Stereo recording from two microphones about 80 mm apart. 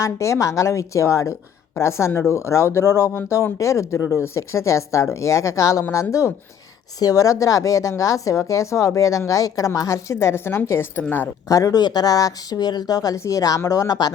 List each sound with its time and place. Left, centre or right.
0.0 s speech: left
11.4 s speech: left
11.8 s speech: left